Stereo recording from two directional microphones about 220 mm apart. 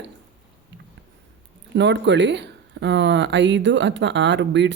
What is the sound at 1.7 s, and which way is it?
Speech, 55° right (ahead or behind).